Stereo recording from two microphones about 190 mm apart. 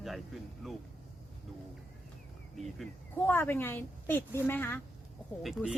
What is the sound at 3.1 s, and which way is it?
A woman's voice, 10° left (ahead or behind).